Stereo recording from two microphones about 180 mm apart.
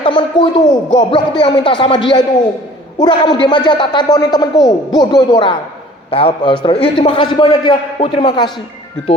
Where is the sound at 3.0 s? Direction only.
25° left (ahead or behind).